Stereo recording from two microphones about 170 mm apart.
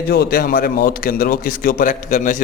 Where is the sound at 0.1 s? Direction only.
65° left (ahead or behind).